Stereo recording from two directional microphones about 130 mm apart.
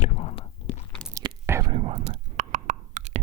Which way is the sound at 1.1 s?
25° right (ahead or behind).